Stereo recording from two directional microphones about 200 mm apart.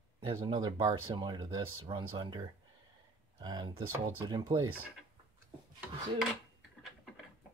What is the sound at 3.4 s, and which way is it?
Speech, 20° right (ahead or behind).